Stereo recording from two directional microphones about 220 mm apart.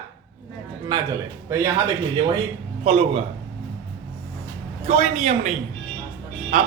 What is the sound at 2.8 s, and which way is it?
Speech, 25° right (ahead or behind).